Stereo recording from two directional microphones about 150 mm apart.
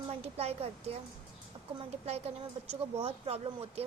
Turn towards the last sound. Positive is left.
turn(degrees=-40)  # may be behind; listen again after turning